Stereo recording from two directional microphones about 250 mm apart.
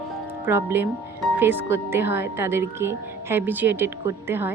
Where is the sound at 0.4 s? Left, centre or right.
Centre.